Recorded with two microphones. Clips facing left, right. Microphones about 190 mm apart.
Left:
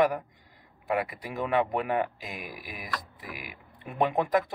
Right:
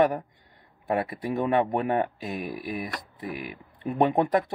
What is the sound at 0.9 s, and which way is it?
Speech, 30° right (ahead or behind).